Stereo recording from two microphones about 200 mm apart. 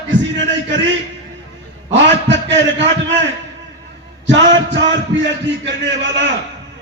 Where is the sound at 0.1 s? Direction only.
65° right (ahead or behind).